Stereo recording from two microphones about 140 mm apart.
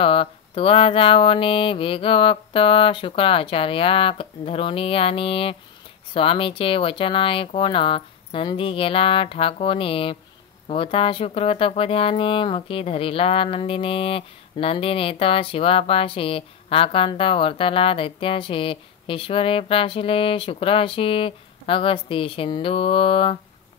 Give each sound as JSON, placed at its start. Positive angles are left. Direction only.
{"t": 0.0, "sound": "speech", "side_deg": 40}